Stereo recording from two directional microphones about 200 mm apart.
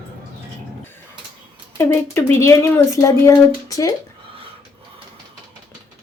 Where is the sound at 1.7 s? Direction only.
10° left (ahead or behind).